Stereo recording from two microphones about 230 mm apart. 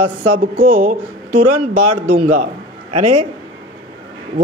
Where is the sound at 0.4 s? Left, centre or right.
Right.